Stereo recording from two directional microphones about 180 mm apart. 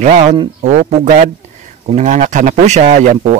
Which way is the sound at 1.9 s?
45° right (ahead or behind).